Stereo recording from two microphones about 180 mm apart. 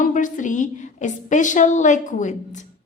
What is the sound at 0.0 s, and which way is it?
A woman's voice, 45° left (ahead or behind).